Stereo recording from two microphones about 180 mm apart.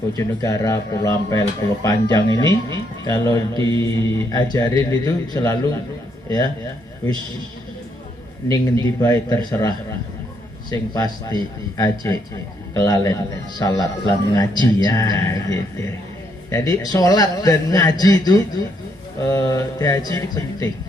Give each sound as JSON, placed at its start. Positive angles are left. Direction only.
{"t": 0.2, "sound": "speech", "side_deg": 20}
{"t": 8.4, "sound": "speech", "side_deg": 20}